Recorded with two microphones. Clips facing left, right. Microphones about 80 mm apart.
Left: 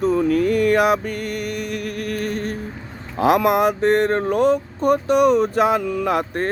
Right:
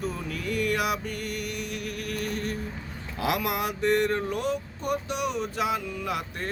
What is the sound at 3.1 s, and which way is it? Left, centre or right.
Speech, left.